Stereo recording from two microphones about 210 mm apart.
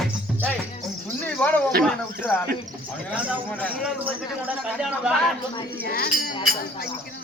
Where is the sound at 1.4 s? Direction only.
10° left (ahead or behind).